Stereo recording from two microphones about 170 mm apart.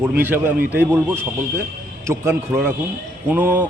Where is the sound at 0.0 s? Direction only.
10° right (ahead or behind).